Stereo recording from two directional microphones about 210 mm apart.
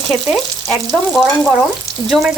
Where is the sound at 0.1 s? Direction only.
Centre (ahead or behind).